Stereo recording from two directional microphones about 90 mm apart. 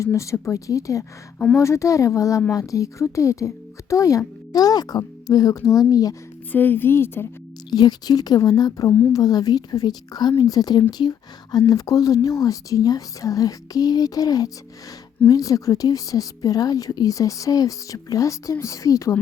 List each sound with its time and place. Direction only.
0.0 s a woman's voice: 35° left (ahead or behind)
6.5 s a woman's voice: 20° left (ahead or behind)
7.7 s a woman's voice: 50° left (ahead or behind)